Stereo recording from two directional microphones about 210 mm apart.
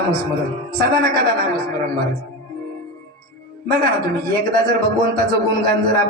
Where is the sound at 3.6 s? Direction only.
45° right (ahead or behind).